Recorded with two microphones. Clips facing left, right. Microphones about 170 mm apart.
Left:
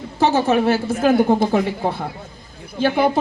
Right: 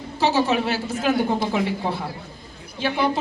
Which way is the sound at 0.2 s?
50° left (ahead or behind).